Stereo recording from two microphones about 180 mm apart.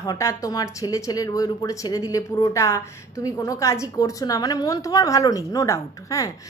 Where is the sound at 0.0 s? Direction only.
20° left (ahead or behind).